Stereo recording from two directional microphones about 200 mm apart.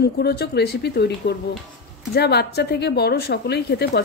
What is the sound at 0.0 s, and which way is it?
A woman's voice, 50° left (ahead or behind).